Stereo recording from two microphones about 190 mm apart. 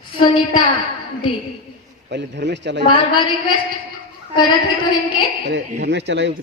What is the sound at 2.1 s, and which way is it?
Speech, 65° right (ahead or behind).